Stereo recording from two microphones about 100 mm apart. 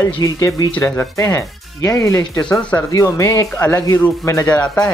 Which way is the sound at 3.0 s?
30° left (ahead or behind).